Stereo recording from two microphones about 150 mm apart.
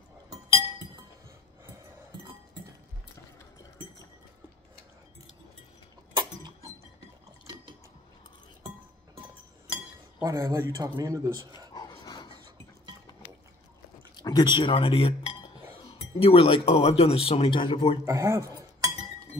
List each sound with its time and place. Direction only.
6.1 s a sound: 25° right (ahead or behind)
10.2 s a man's voice: 20° right (ahead or behind)
11.7 s dog: 25° left (ahead or behind)
14.1 s a sound: 30° left (ahead or behind)
14.6 s cutlery: 40° left (ahead or behind)
16.2 s speech: 40° left (ahead or behind)
18.0 s speech: 20° right (ahead or behind)